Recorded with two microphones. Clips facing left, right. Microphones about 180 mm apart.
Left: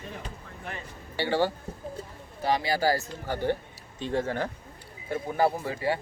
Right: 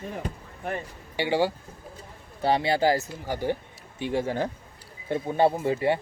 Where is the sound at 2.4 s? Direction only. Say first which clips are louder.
Right 3 dB; 30° right (ahead or behind).